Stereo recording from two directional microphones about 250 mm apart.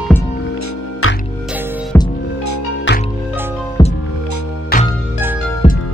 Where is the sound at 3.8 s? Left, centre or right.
Centre.